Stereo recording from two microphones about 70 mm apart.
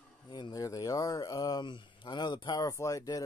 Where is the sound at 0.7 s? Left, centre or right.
Left.